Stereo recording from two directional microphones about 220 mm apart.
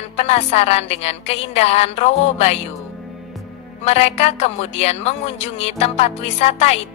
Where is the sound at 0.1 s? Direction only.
30° left (ahead or behind).